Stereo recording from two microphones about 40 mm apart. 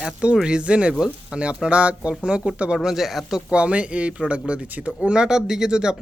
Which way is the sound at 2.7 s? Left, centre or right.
Centre.